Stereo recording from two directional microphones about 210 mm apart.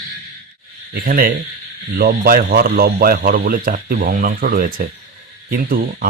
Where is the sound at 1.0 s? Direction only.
45° right (ahead or behind).